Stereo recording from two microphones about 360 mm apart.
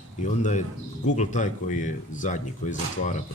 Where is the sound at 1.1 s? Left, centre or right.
Centre.